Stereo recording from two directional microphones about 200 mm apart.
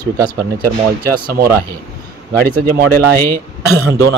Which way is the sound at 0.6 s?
45° right (ahead or behind).